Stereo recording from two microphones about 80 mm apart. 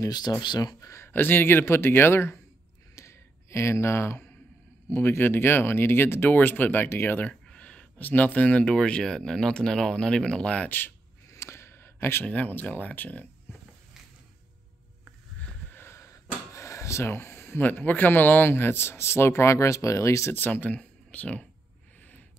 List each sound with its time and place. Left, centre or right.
0.0 s speech: left
0.6 s speech: left
1.1 s speech: left
3.0 s a sound: left
4.8 s speech: left
11.3 s a sound: left
12.3 s speech: centre
15.7 s speech: left
20.3 s speech: left